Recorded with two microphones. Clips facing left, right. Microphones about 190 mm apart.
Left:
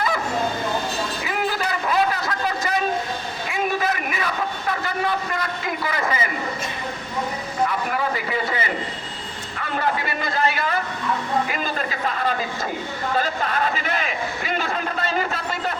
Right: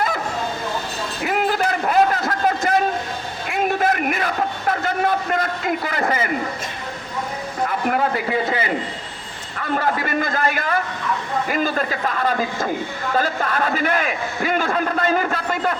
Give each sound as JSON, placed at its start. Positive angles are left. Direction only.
{"t": 1.2, "sound": "a sound", "side_deg": -55}
{"t": 7.7, "sound": "a man's voice", "side_deg": -55}
{"t": 9.6, "sound": "a man's voice", "side_deg": -45}
{"t": 13.1, "sound": "a man's voice", "side_deg": -45}